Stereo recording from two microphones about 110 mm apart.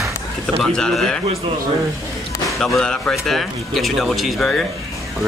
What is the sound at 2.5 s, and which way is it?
Speech, 5° left (ahead or behind).